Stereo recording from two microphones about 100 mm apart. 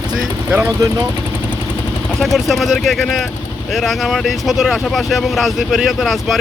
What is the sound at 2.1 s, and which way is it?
Speech, centre (ahead or behind).